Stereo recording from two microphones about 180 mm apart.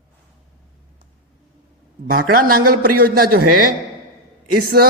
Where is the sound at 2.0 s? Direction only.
55° right (ahead or behind).